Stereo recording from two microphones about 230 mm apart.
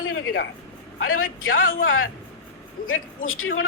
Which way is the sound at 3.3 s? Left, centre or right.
Left.